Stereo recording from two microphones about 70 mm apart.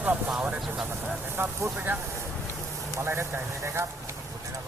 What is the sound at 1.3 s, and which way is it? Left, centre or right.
Speech, right.